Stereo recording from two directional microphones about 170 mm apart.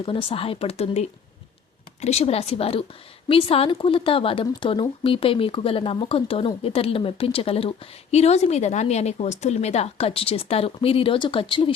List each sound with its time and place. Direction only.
0.0 s a woman's voice: 30° left (ahead or behind)